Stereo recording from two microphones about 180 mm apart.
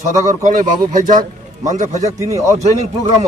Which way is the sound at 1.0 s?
45° right (ahead or behind).